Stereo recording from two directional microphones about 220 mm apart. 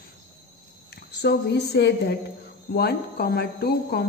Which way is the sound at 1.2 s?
50° left (ahead or behind).